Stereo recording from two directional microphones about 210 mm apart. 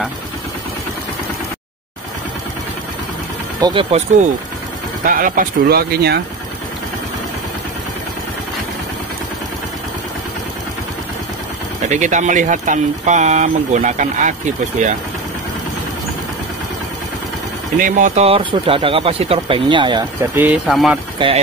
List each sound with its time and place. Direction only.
3.6 s speech: 25° right (ahead or behind)
5.0 s speech: 40° right (ahead or behind)
11.9 s speech: 35° right (ahead or behind)
17.7 s speech: 40° right (ahead or behind); by 20.1 s 20° right (ahead or behind)
20.3 s speech: 5° right (ahead or behind)
21.2 s speech: 25° right (ahead or behind)